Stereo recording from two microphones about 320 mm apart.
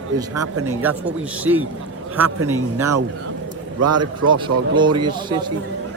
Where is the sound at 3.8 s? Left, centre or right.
Right.